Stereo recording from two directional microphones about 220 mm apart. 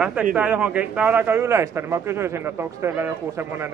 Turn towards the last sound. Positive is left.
turn(degrees=-10)  # may be behind; listen again after turning